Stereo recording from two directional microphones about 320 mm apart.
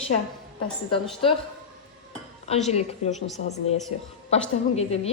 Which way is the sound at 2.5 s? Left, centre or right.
Centre.